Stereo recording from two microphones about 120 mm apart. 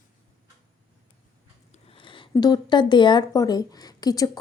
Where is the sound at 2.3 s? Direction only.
35° left (ahead or behind).